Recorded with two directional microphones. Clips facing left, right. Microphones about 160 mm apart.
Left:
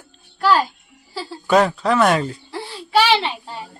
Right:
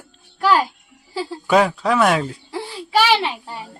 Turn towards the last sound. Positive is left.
turn(degrees=-10)  # may be behind; listen again after turning